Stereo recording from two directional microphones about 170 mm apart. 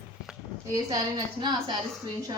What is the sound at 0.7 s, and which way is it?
A woman's voice, 20° right (ahead or behind).